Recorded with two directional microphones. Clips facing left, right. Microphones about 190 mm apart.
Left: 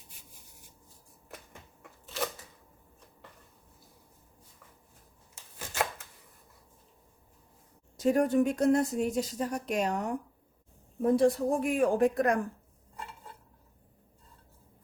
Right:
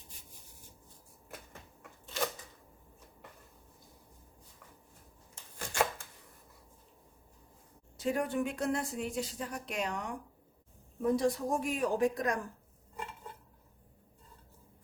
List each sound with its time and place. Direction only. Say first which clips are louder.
1.8 s a sound: left 1 dB; centre (ahead or behind)
5.3 s shuffling cards: right 1 dB; 5° left (ahead or behind)
7.9 s speech: left 7 dB; 45° left (ahead or behind)
11.2 s speech: left 6 dB; 55° left (ahead or behind)